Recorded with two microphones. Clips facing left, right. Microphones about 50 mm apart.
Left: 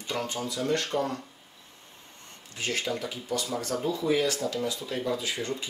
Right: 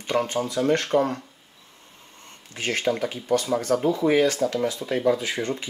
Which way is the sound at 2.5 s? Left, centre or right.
Right.